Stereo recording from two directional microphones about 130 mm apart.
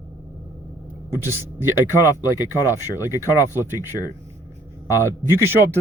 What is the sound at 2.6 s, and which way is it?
Speech, 25° left (ahead or behind).